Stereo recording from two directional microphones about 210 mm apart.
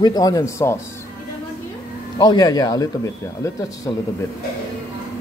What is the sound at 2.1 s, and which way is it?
Speech, 20° left (ahead or behind).